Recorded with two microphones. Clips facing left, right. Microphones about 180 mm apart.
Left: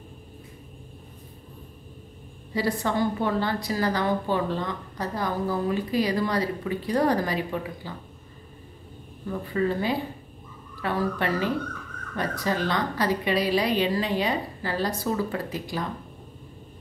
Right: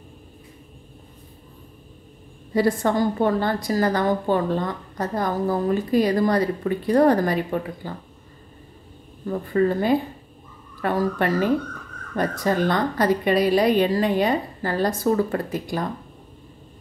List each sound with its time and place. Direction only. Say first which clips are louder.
2.5 s a woman's voice: right 6 dB; 50° right (ahead or behind)
9.3 s a woman's voice: right 5 dB; 45° right (ahead or behind)